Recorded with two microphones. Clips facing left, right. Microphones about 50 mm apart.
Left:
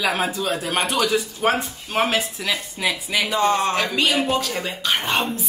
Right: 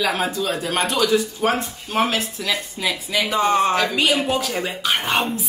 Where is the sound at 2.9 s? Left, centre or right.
Centre.